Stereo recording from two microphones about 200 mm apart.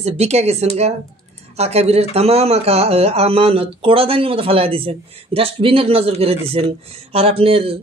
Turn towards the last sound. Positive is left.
turn(degrees=-30)  # may be behind; listen again after turning